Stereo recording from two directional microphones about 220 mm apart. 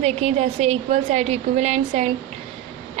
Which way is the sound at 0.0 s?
30° right (ahead or behind).